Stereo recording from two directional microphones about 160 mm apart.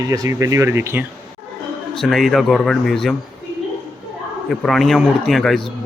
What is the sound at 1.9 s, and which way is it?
Speech, centre (ahead or behind).